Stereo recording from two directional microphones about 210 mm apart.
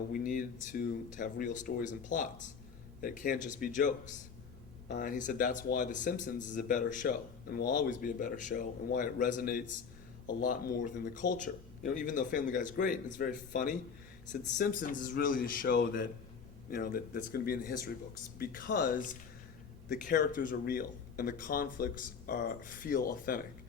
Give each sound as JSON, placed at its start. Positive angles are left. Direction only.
{"t": 0.1, "sound": "speech", "side_deg": 40}